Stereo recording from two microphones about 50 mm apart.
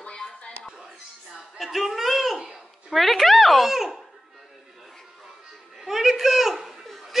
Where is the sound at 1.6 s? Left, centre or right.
Centre.